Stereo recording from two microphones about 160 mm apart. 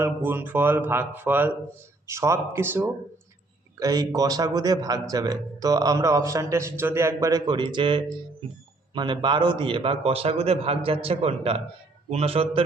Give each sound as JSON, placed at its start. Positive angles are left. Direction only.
{"t": 0.0, "sound": "a man's voice", "side_deg": -10}